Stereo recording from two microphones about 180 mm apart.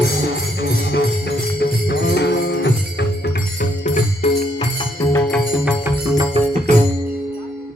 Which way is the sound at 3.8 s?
40° left (ahead or behind).